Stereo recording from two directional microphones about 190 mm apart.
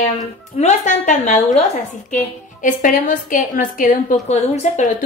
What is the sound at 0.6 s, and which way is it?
A woman's voice, 40° left (ahead or behind).